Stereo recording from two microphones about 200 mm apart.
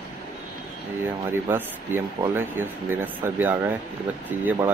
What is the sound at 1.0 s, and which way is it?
Speech, 10° right (ahead or behind).